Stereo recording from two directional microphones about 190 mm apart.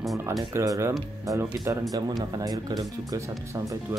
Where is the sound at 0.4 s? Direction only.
15° right (ahead or behind).